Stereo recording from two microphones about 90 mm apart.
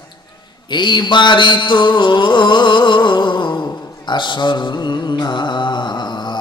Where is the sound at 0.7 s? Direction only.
55° left (ahead or behind).